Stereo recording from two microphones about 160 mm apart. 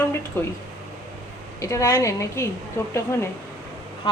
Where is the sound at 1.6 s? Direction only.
20° left (ahead or behind).